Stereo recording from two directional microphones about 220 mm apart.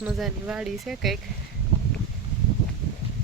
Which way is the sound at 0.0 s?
5° right (ahead or behind).